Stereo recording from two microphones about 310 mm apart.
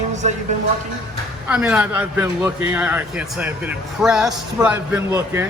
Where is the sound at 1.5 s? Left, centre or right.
Centre.